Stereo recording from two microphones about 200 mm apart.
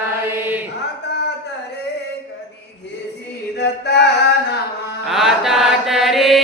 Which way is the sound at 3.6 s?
55° left (ahead or behind).